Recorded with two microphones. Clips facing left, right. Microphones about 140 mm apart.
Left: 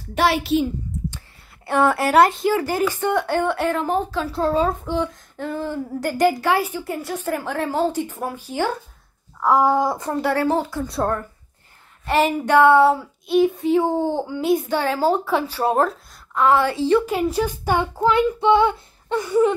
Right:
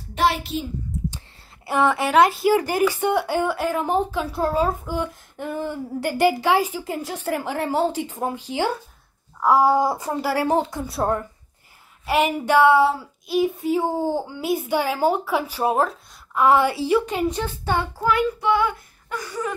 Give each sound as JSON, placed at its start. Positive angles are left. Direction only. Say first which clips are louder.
{"t": 0.1, "sound": "a child's voice", "louder": "left 3 dB", "side_deg": 75}
{"t": 1.7, "sound": "speech", "louder": "left 2 dB", "side_deg": 0}
{"t": 2.5, "sound": "speech", "louder": "right 1 dB", "side_deg": -15}
{"t": 3.8, "sound": "speech", "louder": "even", "side_deg": -15}
{"t": 12.1, "sound": "speech", "louder": "left 2 dB", "side_deg": -10}
{"t": 12.6, "sound": "speech", "louder": "left 3 dB", "side_deg": 0}
{"t": 17.0, "sound": "child singing", "louder": "left 3 dB", "side_deg": 5}